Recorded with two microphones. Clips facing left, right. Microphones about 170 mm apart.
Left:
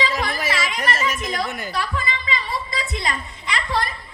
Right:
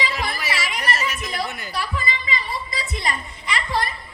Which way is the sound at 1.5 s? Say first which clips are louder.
Left 3 dB; 50° left (ahead or behind).